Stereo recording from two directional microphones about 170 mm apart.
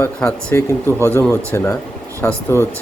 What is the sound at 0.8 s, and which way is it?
Speech, 15° right (ahead or behind).